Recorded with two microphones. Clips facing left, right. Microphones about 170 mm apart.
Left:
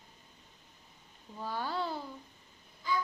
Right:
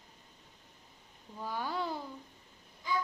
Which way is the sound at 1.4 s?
15° right (ahead or behind).